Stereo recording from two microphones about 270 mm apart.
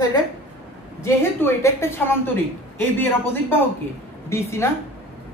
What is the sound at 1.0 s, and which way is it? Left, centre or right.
A woman's voice, centre.